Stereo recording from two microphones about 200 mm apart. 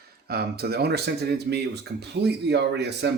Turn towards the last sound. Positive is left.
turn(degrees=-55)  # may be behind; listen again after turning